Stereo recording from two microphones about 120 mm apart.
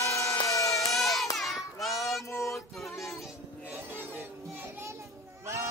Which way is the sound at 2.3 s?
25° left (ahead or behind).